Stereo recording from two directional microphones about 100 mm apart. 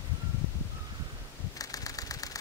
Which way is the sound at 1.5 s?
35° left (ahead or behind).